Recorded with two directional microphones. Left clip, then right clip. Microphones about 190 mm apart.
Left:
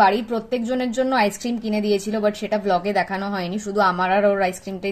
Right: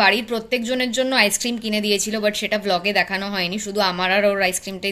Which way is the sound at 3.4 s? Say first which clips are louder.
Left 4 dB; 5° left (ahead or behind).